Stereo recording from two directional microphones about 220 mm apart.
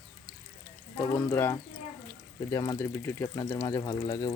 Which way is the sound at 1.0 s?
10° left (ahead or behind).